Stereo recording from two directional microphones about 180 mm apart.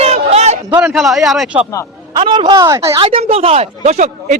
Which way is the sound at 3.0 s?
35° right (ahead or behind).